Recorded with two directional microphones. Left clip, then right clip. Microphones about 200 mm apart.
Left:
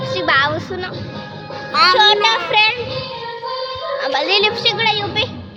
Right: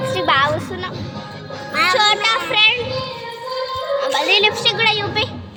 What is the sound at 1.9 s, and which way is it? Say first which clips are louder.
Speech: left 3 dB; 20° left (ahead or behind).